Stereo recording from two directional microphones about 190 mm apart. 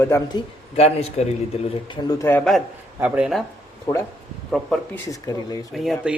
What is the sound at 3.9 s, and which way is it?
Speech, 15° left (ahead or behind).